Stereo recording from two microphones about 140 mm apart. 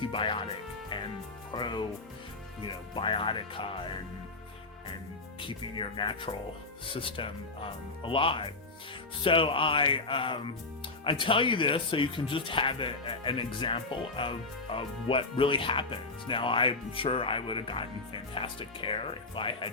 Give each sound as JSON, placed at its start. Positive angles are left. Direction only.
{"t": 0.0, "sound": "speech", "side_deg": 35}
{"t": 1.5, "sound": "speech", "side_deg": 35}
{"t": 5.4, "sound": "speech", "side_deg": 35}